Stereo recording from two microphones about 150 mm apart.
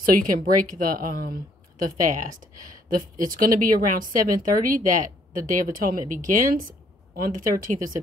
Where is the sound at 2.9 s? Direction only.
70° right (ahead or behind).